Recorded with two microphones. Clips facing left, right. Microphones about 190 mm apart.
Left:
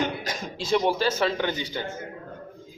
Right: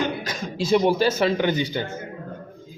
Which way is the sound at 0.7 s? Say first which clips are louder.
Right 4 dB; 10° right (ahead or behind).